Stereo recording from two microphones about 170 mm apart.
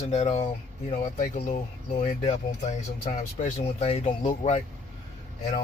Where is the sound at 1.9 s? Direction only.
35° left (ahead or behind).